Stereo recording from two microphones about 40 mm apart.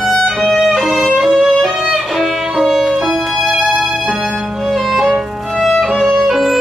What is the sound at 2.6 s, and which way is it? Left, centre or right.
Violin, centre.